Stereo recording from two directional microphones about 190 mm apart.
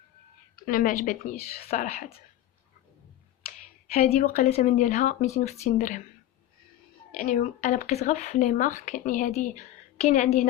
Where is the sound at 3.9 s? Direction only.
35° left (ahead or behind).